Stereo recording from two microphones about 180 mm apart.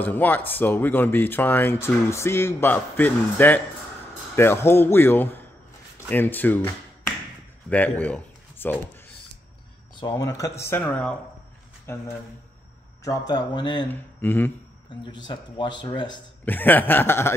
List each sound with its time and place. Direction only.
0.0 s speech: 10° left (ahead or behind)
7.7 s speech: 10° left (ahead or behind)
10.1 s speech: 15° left (ahead or behind)
13.3 s speech: 25° left (ahead or behind)
13.8 s speech: 10° left (ahead or behind)
15.2 s speech: 25° left (ahead or behind)
16.4 s speech: 10° left (ahead or behind)